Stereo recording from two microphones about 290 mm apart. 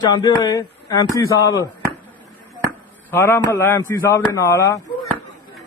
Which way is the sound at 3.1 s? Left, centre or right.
Centre.